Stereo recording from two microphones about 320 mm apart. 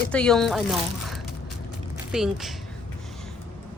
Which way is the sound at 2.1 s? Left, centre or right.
Centre.